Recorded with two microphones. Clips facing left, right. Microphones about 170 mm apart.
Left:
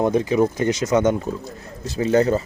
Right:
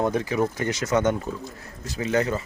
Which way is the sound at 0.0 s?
20° left (ahead or behind).